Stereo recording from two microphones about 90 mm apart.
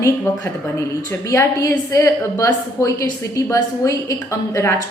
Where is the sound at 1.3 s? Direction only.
35° left (ahead or behind).